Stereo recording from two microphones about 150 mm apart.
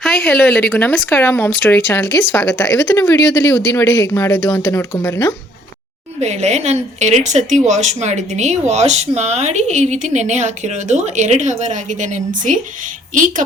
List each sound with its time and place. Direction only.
0.0 s speech: centre (ahead or behind); by 5.3 s 20° left (ahead or behind)
6.1 s a woman's voice: 45° right (ahead or behind)